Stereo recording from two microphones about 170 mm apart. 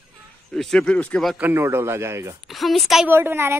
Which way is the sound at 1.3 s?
15° right (ahead or behind).